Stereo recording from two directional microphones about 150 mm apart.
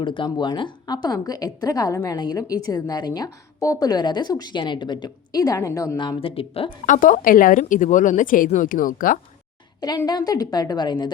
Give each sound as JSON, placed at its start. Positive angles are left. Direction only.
{"t": 0.0, "sound": "speech", "side_deg": 35}
{"t": 6.8, "sound": "speech", "side_deg": 60}
{"t": 10.1, "sound": "speech", "side_deg": 25}